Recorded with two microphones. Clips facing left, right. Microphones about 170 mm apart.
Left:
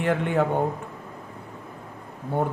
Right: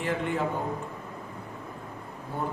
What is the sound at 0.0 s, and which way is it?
Speech, 60° left (ahead or behind).